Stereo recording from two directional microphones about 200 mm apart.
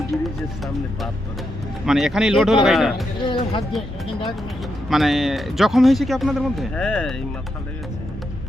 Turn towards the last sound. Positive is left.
turn(degrees=5)  # may be behind; listen again after turning